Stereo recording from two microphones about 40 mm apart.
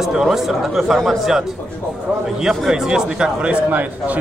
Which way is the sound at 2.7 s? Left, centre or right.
Centre.